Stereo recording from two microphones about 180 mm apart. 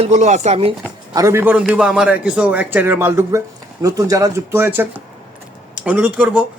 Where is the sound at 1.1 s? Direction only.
15° right (ahead or behind).